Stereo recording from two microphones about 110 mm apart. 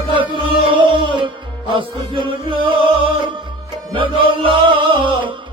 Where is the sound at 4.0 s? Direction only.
50° right (ahead or behind).